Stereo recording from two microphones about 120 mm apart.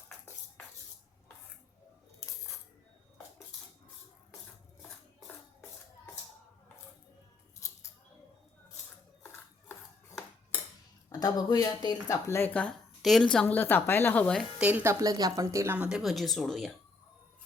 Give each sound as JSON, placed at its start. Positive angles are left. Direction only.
{"t": 7.6, "sound": "scissors", "side_deg": 25}
{"t": 11.1, "sound": "speech", "side_deg": 35}
{"t": 13.0, "sound": "speech", "side_deg": 0}
{"t": 14.6, "sound": "a woman's voice", "side_deg": -15}
{"t": 15.9, "sound": "speech", "side_deg": -5}